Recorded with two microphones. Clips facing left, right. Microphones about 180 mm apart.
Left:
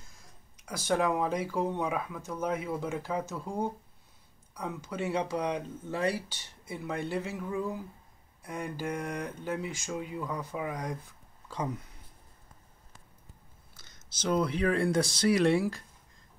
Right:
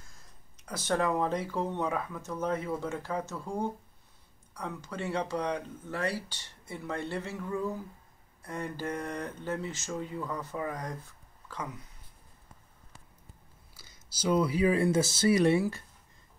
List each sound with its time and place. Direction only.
0.7 s speech: 10° left (ahead or behind)
4.6 s speech: 15° left (ahead or behind)
13.7 s speech: 5° right (ahead or behind)